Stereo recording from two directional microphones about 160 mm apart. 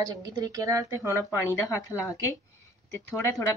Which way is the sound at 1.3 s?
20° left (ahead or behind).